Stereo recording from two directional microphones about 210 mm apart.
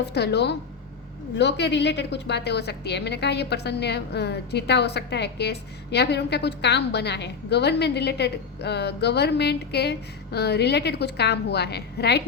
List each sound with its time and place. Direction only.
0.0 s a woman's voice: 50° left (ahead or behind)